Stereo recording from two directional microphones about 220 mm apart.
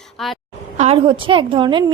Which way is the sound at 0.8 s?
25° right (ahead or behind).